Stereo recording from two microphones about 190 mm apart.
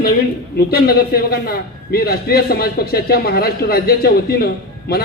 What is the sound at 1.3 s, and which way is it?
A man's voice, 50° left (ahead or behind).